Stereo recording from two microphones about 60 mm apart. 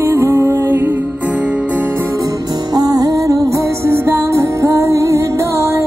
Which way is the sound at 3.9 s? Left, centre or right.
Right.